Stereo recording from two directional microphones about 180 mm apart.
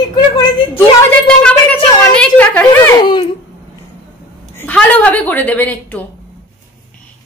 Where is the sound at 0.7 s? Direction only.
5° left (ahead or behind).